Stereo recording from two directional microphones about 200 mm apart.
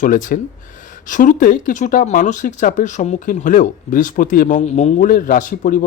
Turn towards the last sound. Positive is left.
turn(degrees=40)  # may be behind; listen again after turning